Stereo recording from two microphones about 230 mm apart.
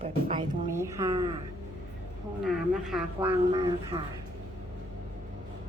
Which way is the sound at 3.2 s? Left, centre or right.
Right.